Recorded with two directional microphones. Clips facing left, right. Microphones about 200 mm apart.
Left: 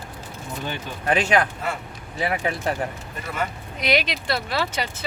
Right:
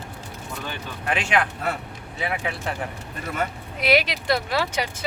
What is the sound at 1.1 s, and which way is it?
Speech, 40° left (ahead or behind).